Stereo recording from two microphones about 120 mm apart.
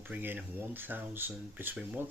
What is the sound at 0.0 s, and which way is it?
Speech, 15° right (ahead or behind).